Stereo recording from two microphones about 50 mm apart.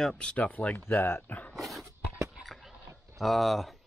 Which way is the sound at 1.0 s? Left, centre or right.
Left.